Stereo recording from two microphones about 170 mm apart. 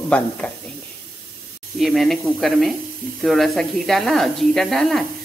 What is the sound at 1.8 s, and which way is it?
Speech, centre (ahead or behind).